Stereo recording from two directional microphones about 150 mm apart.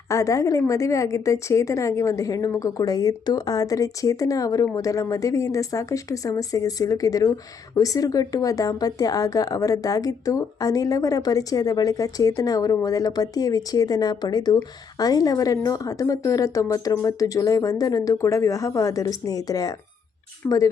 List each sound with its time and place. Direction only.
0.1 s speech: 20° left (ahead or behind)